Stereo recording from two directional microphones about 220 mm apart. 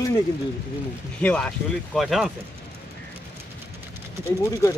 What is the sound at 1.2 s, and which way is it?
Speech, 5° left (ahead or behind).